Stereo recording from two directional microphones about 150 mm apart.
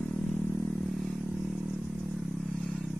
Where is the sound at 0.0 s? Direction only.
Centre (ahead or behind).